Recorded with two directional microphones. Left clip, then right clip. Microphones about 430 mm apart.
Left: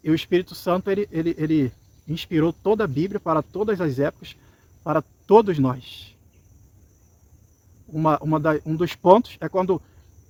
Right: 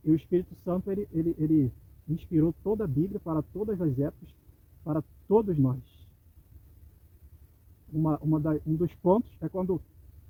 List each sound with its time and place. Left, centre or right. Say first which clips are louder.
0.1 s speech: left 5 dB; centre
8.0 s speech: left 9 dB; centre